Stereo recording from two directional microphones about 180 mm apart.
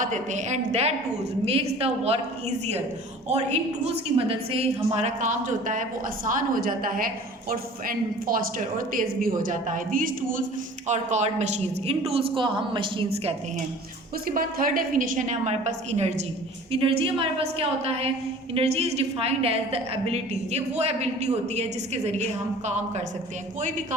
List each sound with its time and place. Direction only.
0.0 s a woman's voice: 45° right (ahead or behind)
3.2 s a woman's voice: 40° right (ahead or behind)
14.3 s a woman's voice: 50° right (ahead or behind)